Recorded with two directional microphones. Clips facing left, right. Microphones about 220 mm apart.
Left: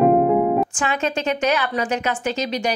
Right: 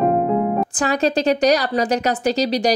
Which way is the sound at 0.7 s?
35° right (ahead or behind).